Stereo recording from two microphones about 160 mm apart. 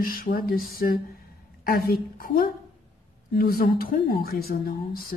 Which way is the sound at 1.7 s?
70° left (ahead or behind).